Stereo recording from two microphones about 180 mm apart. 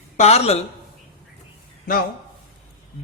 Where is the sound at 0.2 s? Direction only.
35° left (ahead or behind).